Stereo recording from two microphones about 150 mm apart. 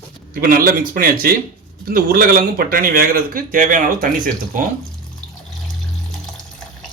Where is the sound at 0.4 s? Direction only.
80° right.